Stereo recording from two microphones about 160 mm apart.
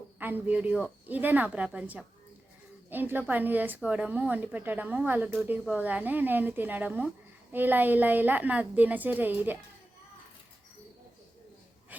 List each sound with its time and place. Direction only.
0.2 s speech: 10° right (ahead or behind)